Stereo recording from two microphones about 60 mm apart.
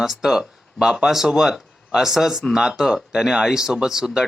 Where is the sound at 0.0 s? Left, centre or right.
Centre.